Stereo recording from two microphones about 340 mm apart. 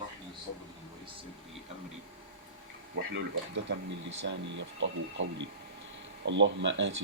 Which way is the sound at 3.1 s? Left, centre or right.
Right.